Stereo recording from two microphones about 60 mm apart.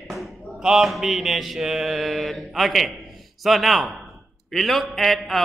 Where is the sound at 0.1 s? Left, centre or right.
Centre.